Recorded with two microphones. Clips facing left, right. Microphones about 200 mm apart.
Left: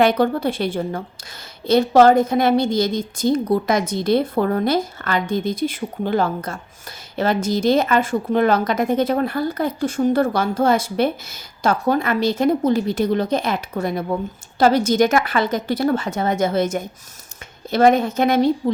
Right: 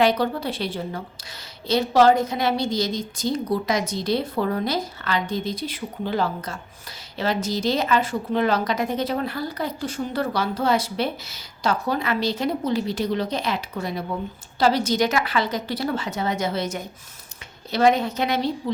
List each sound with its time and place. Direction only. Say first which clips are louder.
0.0 s a woman's voice: left 4 dB; 50° left (ahead or behind)